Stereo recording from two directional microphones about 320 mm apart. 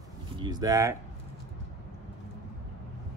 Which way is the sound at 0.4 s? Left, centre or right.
Centre.